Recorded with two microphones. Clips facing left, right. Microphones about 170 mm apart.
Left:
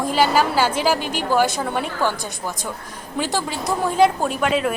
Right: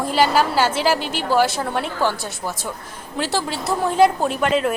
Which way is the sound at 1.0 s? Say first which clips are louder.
Left 1 dB; 45° left (ahead or behind).